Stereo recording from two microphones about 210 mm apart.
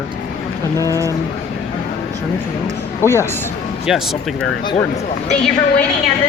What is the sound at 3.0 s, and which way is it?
Speech, 10° left (ahead or behind).